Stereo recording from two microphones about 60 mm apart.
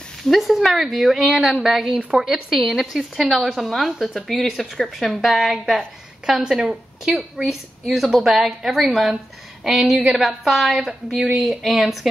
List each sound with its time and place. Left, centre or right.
0.2 s a woman's voice: centre
2.0 s speech: centre
2.2 s a woman's voice: centre